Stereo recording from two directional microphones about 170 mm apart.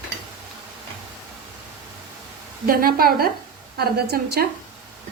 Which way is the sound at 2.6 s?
60° right (ahead or behind).